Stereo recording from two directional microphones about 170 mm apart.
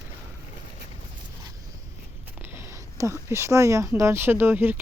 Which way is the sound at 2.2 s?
10° right (ahead or behind).